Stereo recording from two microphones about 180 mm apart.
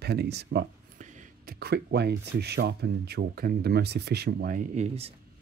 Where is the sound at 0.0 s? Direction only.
65° right (ahead or behind).